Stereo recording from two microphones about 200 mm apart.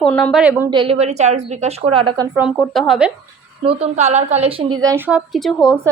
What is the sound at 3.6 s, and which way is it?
A woman's voice, 30° right (ahead or behind).